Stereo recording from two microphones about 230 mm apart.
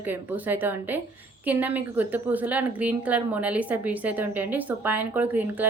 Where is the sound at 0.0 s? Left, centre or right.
Centre.